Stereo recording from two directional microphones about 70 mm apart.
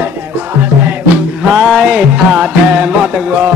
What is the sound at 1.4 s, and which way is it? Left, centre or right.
Music, centre.